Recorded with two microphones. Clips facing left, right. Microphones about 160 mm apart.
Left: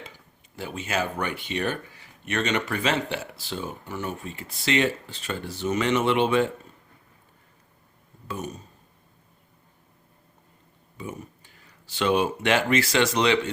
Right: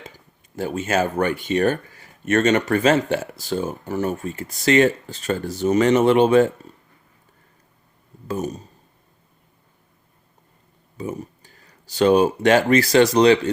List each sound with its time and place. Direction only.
0.0 s speech: 45° right (ahead or behind)
8.3 s speech: 40° right (ahead or behind)
10.9 s speech: 40° right (ahead or behind)